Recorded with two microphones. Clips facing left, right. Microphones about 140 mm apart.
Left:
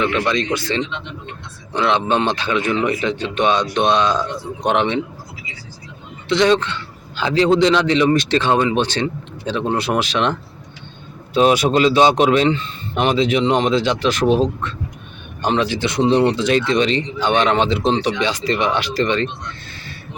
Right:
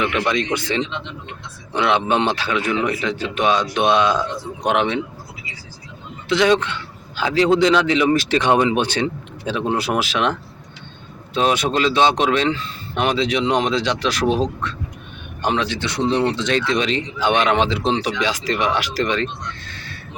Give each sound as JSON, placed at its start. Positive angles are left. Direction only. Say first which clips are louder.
{"t": 0.0, "sound": "a man's voice", "louder": "left 1 dB", "side_deg": -10}
{"t": 1.7, "sound": "a man's voice", "louder": "left 1 dB", "side_deg": -10}
{"t": 6.2, "sound": "a man's voice", "louder": "left 1 dB", "side_deg": -5}
{"t": 8.4, "sound": "a man's voice", "louder": "even", "side_deg": -15}
{"t": 11.3, "sound": "a man's voice", "louder": "left 4 dB", "side_deg": 5}
{"t": 16.0, "sound": "speech", "louder": "left 4 dB", "side_deg": 25}
{"t": 16.3, "sound": "a man's voice", "louder": "left 3 dB", "side_deg": 10}